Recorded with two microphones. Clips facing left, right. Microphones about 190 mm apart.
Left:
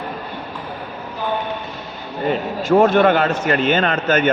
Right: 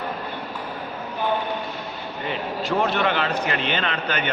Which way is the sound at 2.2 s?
45° left (ahead or behind).